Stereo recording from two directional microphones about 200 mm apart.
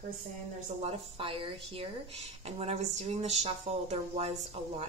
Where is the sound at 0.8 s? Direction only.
25° right (ahead or behind).